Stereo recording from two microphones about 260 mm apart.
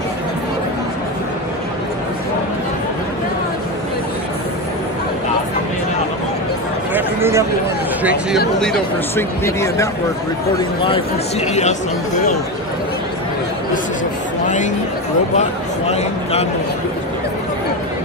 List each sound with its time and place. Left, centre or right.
6.9 s a sound: centre
8.5 s speech: centre
15.9 s speech: left